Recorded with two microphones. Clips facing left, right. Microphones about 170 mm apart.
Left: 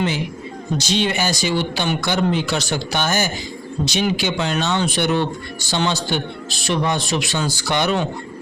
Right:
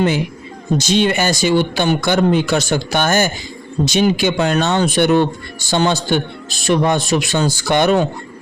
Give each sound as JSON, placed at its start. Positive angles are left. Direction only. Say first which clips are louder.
{"t": 0.8, "sound": "speech", "louder": "right 5 dB", "side_deg": -50}